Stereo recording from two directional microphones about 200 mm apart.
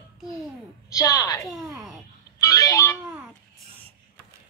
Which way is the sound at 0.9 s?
15° left (ahead or behind).